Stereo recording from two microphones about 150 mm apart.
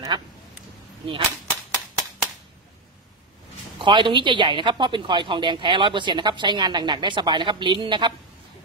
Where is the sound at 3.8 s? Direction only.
35° right (ahead or behind).